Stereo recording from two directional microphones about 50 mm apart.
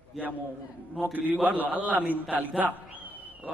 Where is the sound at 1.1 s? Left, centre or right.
Right.